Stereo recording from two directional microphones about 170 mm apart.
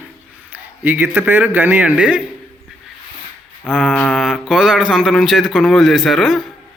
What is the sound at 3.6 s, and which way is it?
Speech, centre (ahead or behind).